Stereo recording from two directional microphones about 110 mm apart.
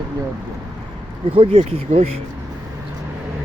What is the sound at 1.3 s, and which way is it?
Speech, 60° right (ahead or behind).